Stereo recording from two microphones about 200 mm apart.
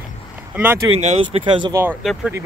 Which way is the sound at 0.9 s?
30° right (ahead or behind).